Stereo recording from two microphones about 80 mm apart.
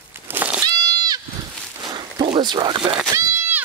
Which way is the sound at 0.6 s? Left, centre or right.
Right.